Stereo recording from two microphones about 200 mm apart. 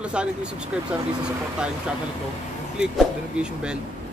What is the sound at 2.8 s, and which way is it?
Speech, 5° right (ahead or behind).